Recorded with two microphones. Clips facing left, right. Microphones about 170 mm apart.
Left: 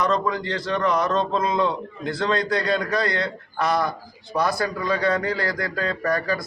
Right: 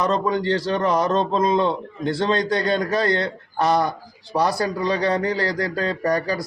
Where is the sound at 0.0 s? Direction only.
30° right (ahead or behind).